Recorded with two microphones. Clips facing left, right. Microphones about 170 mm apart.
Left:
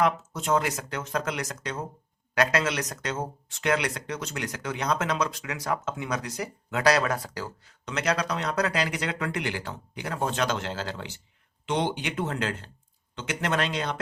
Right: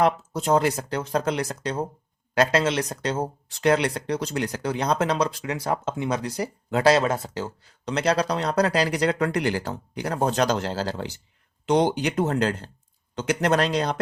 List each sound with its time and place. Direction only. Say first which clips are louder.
0.0 s speech: right 4 dB; 35° right (ahead or behind)